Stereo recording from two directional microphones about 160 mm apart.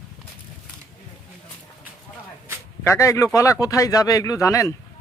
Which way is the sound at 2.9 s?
20° left (ahead or behind).